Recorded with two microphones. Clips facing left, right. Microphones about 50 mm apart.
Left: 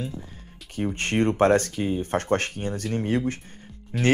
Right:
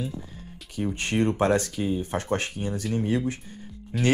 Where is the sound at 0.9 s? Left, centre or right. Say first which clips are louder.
Left 2 dB; left.